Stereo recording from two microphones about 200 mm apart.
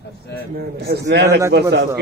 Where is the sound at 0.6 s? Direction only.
55° right (ahead or behind).